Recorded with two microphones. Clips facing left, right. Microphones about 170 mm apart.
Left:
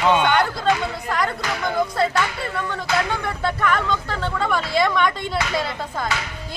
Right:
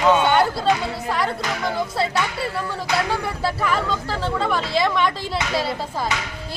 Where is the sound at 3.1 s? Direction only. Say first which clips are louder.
Even; 5° right (ahead or behind).